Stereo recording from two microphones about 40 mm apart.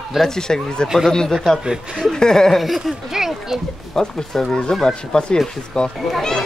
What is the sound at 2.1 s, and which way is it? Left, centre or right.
Speech, centre.